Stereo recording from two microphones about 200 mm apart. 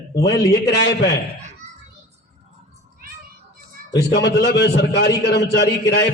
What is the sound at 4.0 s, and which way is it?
A man's voice, 60° left (ahead or behind).